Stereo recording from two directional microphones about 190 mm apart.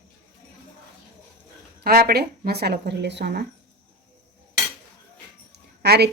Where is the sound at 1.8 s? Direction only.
55° right (ahead or behind).